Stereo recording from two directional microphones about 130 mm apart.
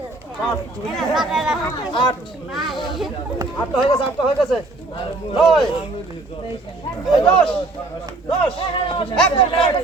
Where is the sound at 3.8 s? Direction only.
40° left (ahead or behind).